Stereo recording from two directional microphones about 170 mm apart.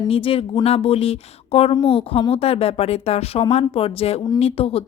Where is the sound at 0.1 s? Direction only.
35° left (ahead or behind).